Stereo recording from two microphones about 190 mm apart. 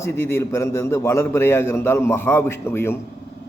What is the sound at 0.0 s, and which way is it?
A man's voice, 15° left (ahead or behind).